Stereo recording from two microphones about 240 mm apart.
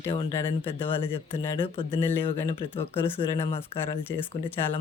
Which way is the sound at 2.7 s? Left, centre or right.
Centre.